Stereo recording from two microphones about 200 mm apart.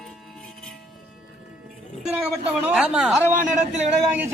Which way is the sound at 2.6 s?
5° right (ahead or behind).